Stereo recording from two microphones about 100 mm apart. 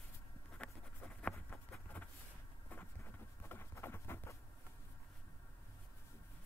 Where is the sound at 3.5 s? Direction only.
25° left (ahead or behind).